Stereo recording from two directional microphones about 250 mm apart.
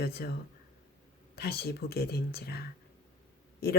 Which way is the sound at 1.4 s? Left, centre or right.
Left.